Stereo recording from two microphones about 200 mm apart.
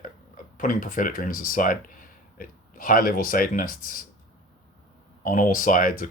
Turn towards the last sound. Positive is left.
turn(degrees=45)  # may be behind; listen again after turning